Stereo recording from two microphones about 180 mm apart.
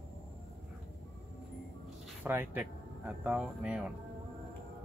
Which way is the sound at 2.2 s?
10° right (ahead or behind).